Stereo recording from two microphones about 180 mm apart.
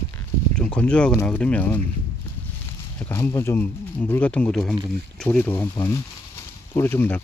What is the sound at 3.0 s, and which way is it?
Speech, 10° left (ahead or behind).